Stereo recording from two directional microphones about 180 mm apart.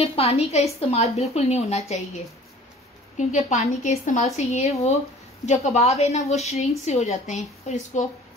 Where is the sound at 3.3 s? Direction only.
40° left (ahead or behind).